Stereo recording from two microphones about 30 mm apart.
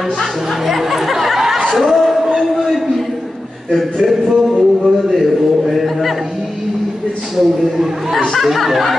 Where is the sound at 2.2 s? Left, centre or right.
Centre.